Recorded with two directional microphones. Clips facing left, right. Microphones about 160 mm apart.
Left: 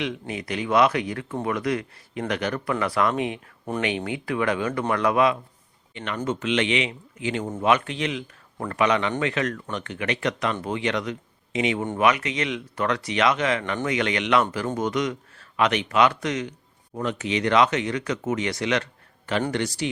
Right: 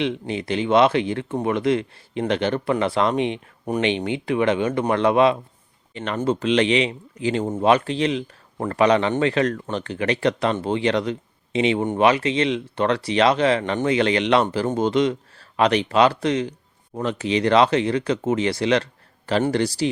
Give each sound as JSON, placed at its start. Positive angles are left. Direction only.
{"t": 0.0, "sound": "speech", "side_deg": -30}